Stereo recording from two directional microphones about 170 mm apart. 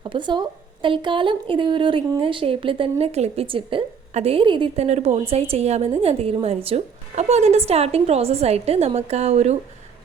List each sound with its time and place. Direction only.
0.0 s a woman's voice: 25° right (ahead or behind)